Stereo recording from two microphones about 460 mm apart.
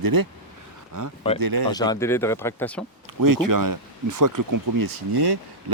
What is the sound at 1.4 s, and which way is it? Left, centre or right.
Speech, right.